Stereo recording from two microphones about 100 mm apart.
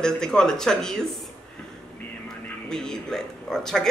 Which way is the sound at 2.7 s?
5° left (ahead or behind).